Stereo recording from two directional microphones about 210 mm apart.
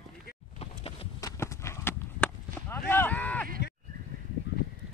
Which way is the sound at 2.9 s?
10° left (ahead or behind).